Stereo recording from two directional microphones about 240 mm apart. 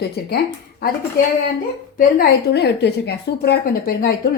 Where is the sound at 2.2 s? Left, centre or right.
Left.